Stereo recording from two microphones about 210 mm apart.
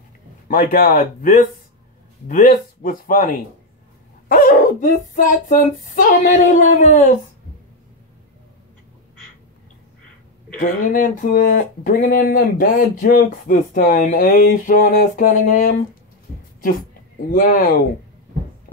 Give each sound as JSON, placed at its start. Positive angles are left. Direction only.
{"t": 0.5, "sound": "speech", "side_deg": 45}
{"t": 10.9, "sound": "speech", "side_deg": 40}
{"t": 17.3, "sound": "speech", "side_deg": 40}